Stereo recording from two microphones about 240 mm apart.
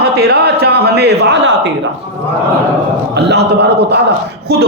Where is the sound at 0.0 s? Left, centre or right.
Right.